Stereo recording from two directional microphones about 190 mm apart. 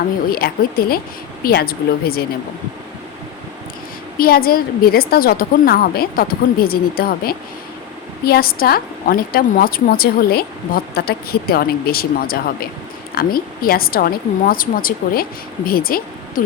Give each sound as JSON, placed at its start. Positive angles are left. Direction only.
{"t": 0.3, "sound": "a woman's voice", "side_deg": 50}
{"t": 4.2, "sound": "a woman's voice", "side_deg": 50}